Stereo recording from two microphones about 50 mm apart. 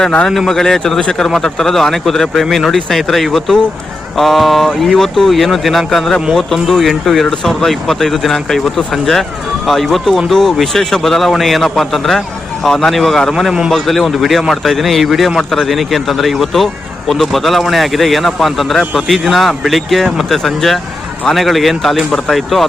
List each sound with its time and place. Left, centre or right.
0.0 s a man's voice: centre
0.3 s a man's voice: centre
13.3 s a man's voice: centre
13.7 s a man's voice: centre